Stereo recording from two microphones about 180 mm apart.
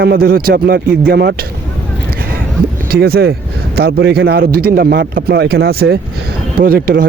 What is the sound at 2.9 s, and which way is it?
Speech, 60° right (ahead or behind).